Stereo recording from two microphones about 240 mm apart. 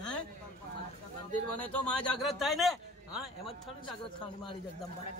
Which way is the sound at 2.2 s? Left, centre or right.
Centre.